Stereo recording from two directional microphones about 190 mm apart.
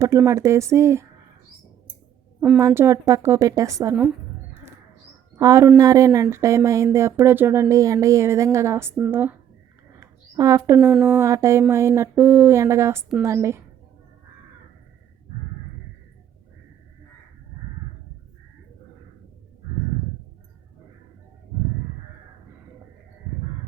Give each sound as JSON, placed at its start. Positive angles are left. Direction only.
{"t": 0.0, "sound": "speech", "side_deg": -15}
{"t": 2.6, "sound": "speech", "side_deg": -15}
{"t": 5.4, "sound": "speech", "side_deg": -15}
{"t": 10.0, "sound": "a sound", "side_deg": -15}
{"t": 10.8, "sound": "speech", "side_deg": -5}